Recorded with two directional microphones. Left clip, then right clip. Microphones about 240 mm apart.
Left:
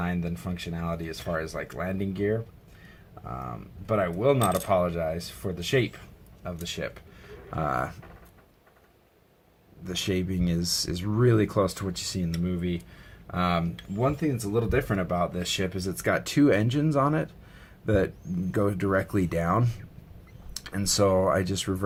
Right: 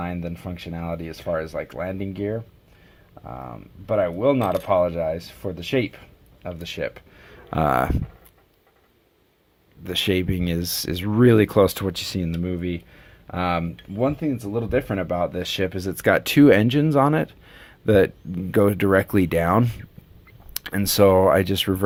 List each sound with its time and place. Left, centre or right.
0.0 s speech: right
3.8 s speech: right
9.8 s speech: right